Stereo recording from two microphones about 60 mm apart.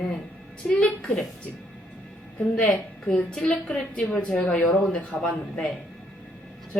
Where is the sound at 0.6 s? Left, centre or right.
Centre.